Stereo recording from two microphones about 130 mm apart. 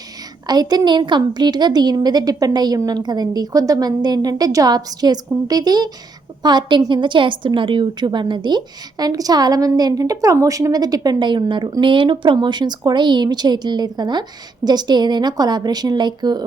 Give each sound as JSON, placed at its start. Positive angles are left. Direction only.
{"t": 0.4, "sound": "a woman's voice", "side_deg": -30}